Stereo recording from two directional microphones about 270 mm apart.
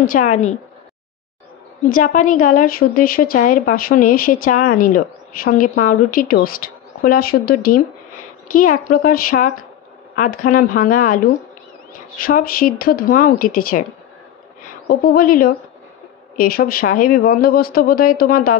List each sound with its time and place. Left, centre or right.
0.0 s speech: left
1.9 s a woman's voice: left
12.2 s a woman's voice: left